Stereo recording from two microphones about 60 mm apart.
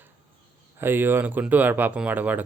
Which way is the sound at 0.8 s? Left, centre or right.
Right.